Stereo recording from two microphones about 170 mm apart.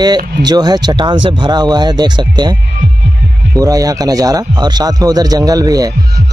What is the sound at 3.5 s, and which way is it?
A man's voice, 20° right (ahead or behind).